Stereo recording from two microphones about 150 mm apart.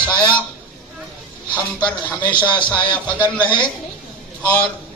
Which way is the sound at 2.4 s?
30° left (ahead or behind).